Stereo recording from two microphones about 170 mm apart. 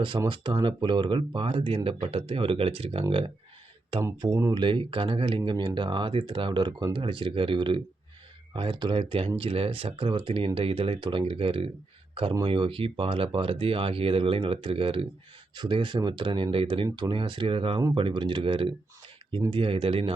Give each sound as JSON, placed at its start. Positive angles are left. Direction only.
{"t": 0.2, "sound": "speech", "side_deg": -30}
{"t": 4.0, "sound": "speech", "side_deg": -20}
{"t": 4.6, "sound": "speech", "side_deg": -30}